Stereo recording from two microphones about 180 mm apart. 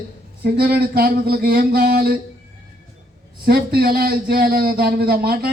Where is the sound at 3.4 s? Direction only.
60° right (ahead or behind).